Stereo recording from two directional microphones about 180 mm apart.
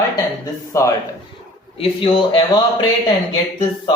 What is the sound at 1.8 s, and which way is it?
Speech, 30° left (ahead or behind).